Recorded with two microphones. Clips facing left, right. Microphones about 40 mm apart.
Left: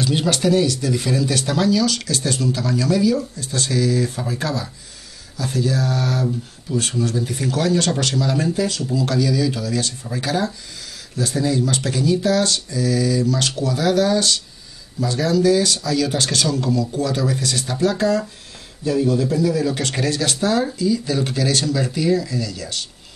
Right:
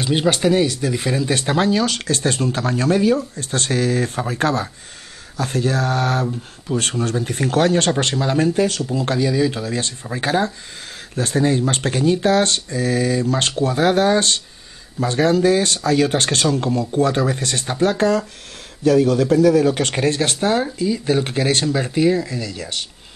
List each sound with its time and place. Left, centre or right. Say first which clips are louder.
0.0 s speech: right 2 dB; right